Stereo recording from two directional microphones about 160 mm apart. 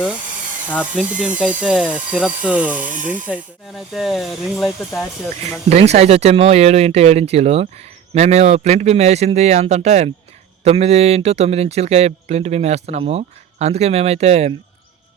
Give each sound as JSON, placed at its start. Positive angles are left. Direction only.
{"t": 0.9, "sound": "speech", "side_deg": -5}
{"t": 5.6, "sound": "speech", "side_deg": -40}